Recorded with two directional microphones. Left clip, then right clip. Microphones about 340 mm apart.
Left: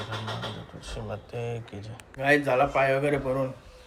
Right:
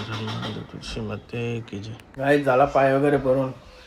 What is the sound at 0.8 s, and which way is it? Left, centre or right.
Speech, centre.